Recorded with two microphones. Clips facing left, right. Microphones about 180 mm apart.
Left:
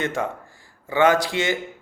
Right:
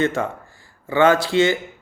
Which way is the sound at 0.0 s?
15° left (ahead or behind).